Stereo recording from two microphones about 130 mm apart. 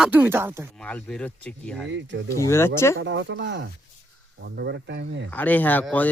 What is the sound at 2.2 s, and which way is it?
Speech, 20° left (ahead or behind).